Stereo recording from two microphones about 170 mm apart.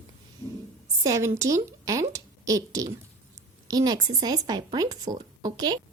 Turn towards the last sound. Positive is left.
turn(degrees=-25)  # may be behind; listen again after turning